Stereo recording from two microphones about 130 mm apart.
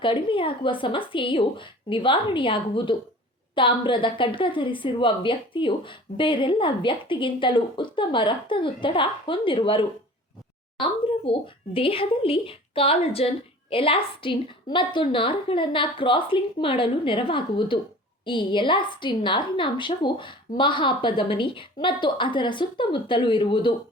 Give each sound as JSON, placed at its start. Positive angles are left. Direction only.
{"t": 0.0, "sound": "a woman's voice", "side_deg": 40}
{"t": 11.4, "sound": "a woman's voice", "side_deg": 45}